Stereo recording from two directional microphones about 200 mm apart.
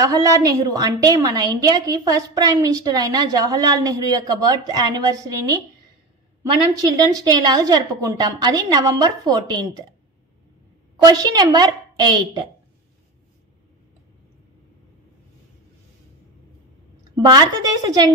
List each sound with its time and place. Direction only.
0.0 s a woman's voice: 15° right (ahead or behind)
6.8 s a woman's voice: 20° right (ahead or behind)
11.1 s a woman's voice: 20° right (ahead or behind)
17.1 s a woman's voice: 20° right (ahead or behind)